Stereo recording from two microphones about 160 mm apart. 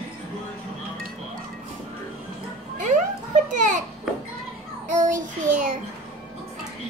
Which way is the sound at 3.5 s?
50° right (ahead or behind).